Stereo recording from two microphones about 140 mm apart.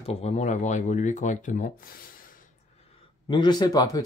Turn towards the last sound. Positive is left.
turn(degrees=25)  # may be behind; listen again after turning